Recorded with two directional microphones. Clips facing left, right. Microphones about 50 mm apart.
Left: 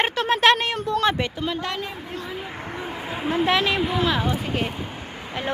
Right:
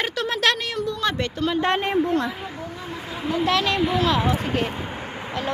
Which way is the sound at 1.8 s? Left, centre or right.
Right.